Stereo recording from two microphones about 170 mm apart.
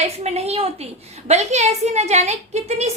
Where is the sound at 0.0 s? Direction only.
40° right (ahead or behind).